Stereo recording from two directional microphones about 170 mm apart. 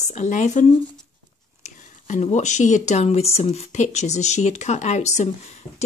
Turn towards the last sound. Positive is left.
turn(degrees=40)  # may be behind; listen again after turning